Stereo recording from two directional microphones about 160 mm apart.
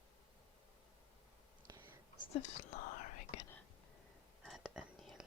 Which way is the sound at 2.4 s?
50° left (ahead or behind).